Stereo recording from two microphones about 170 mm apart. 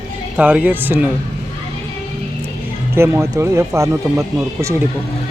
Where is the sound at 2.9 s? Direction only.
15° right (ahead or behind).